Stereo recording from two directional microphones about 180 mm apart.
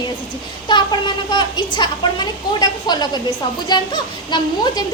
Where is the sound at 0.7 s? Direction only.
25° left (ahead or behind).